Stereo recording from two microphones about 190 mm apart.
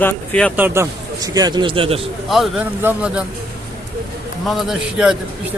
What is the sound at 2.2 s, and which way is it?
Speech, centre (ahead or behind).